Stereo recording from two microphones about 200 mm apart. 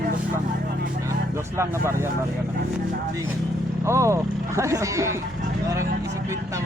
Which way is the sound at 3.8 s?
15° right (ahead or behind).